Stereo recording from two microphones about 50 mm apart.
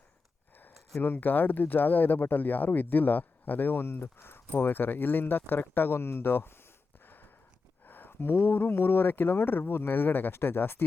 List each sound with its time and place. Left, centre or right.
1.0 s speech: left
7.0 s a sound: left
7.9 s speech: left